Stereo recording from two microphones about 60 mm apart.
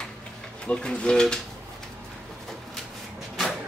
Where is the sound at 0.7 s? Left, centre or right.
Centre.